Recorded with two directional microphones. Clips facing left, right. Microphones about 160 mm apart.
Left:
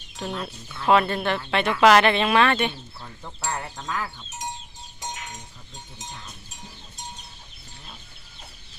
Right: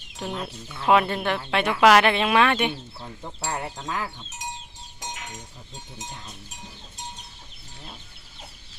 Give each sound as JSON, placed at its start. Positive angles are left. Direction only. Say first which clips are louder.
{"t": 0.2, "sound": "speech", "louder": "even", "side_deg": -15}